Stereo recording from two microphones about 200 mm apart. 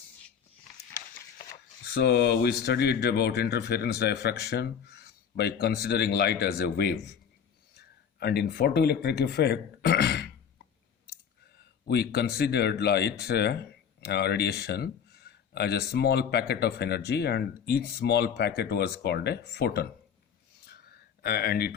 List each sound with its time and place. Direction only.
1.9 s speech: 55° left (ahead or behind)
11.9 s speech: 55° left (ahead or behind)
21.2 s speech: 50° left (ahead or behind)